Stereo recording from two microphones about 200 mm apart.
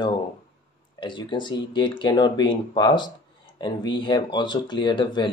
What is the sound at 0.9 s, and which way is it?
Speech, 25° left (ahead or behind).